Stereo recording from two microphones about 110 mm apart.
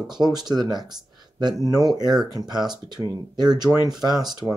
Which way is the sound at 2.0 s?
Centre (ahead or behind).